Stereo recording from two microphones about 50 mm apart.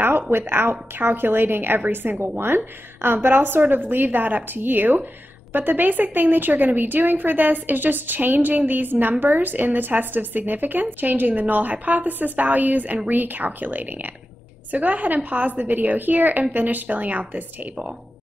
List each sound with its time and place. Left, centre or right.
0.0 s a woman's voice: right